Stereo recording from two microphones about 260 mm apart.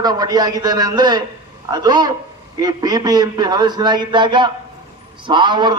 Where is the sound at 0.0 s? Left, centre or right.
Centre.